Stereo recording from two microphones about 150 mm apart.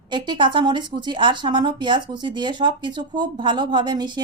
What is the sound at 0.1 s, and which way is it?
A woman's voice, 30° right (ahead or behind).